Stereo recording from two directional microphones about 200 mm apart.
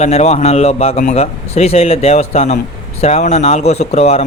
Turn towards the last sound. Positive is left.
turn(degrees=30)  # may be behind; listen again after turning